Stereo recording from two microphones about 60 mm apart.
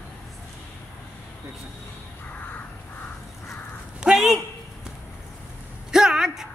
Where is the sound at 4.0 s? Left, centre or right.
Centre.